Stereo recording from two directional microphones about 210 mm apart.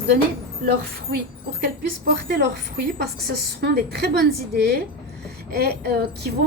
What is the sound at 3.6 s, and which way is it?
Speech, 50° right (ahead or behind).